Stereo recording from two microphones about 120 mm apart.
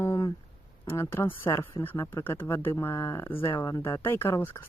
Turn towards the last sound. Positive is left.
turn(degrees=20)  # may be behind; listen again after turning